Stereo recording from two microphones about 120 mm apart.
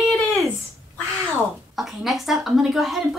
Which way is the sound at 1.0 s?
25° right (ahead or behind).